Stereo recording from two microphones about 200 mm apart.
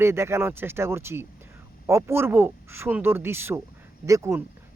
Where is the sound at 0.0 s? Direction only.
15° right (ahead or behind).